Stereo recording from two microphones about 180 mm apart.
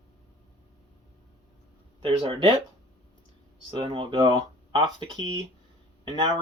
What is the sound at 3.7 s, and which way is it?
Speech, 30° right (ahead or behind).